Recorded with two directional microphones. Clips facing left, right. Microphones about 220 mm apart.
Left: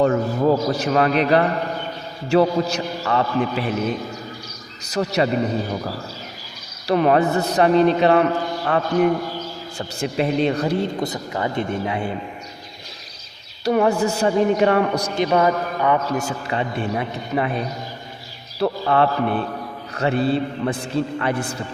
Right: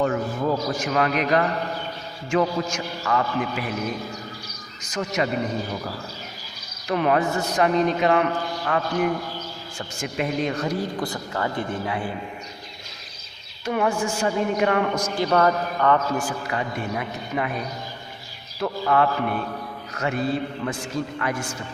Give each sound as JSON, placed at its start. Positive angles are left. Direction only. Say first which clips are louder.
{"t": 0.0, "sound": "a man's voice", "louder": "left 5 dB", "side_deg": 40}
{"t": 4.9, "sound": "a man's voice", "louder": "left 5 dB", "side_deg": 35}
{"t": 6.8, "sound": "a man's voice", "louder": "left 5 dB", "side_deg": 35}
{"t": 13.7, "sound": "a man's voice", "louder": "left 6 dB", "side_deg": 40}
{"t": 15.1, "sound": "a man's voice", "louder": "left 2 dB", "side_deg": 15}
{"t": 16.2, "sound": "speech", "louder": "left 3 dB", "side_deg": 25}
{"t": 18.6, "sound": "a man's voice", "louder": "left 3 dB", "side_deg": 30}